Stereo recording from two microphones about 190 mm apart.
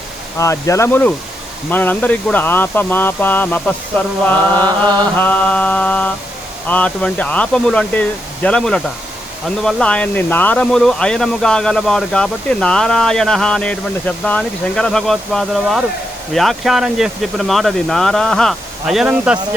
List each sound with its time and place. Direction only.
0.3 s speech: 15° left (ahead or behind)
4.6 s chant: 20° right (ahead or behind)
5.1 s speech: 10° left (ahead or behind)